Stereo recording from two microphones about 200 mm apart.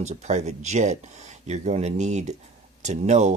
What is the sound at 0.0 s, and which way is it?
Speech, 35° right (ahead or behind).